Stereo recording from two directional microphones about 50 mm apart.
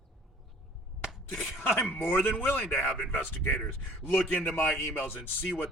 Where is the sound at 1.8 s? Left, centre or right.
Left.